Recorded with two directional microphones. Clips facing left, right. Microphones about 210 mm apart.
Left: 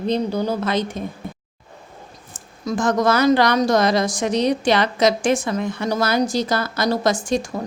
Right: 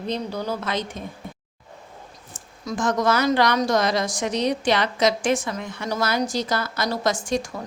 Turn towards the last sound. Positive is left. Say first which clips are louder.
# left 4 dB
turn(degrees=30)  # may be behind; listen again after turning